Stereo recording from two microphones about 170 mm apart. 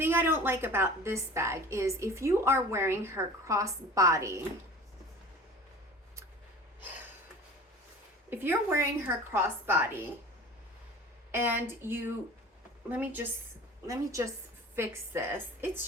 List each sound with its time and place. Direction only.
0.0 s a woman's voice: 15° right (ahead or behind)
8.3 s a woman's voice: 10° right (ahead or behind)
11.3 s a woman's voice: 15° right (ahead or behind)